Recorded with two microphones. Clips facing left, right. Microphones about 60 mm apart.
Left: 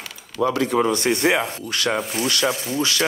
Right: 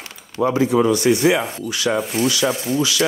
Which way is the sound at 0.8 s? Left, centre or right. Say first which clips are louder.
Right 4 dB; left.